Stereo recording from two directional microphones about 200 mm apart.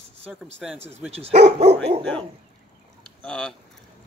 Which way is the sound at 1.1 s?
30° right (ahead or behind).